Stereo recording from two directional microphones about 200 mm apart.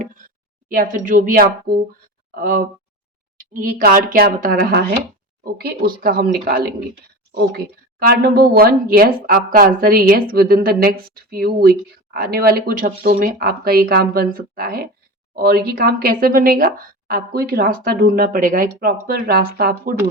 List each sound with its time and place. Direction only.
0.7 s speech: 40° right (ahead or behind)